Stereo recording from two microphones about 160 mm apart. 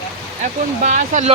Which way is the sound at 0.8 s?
50° right (ahead or behind).